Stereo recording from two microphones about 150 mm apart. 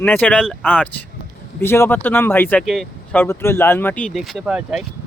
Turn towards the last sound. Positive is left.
turn(degrees=-5)  # may be behind; listen again after turning